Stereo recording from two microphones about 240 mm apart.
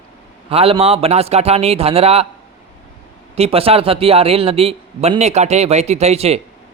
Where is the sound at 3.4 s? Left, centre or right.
Right.